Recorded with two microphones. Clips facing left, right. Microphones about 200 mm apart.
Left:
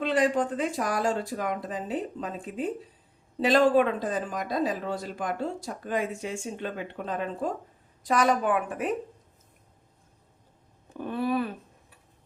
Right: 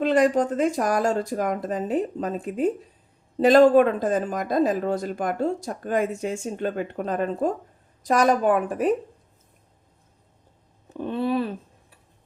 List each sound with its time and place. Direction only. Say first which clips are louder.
0.0 s speech: right 5 dB; 45° right (ahead or behind)
10.9 s speech: right 3 dB; 25° right (ahead or behind)